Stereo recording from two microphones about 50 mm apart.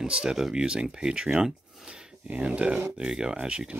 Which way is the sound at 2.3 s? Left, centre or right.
Right.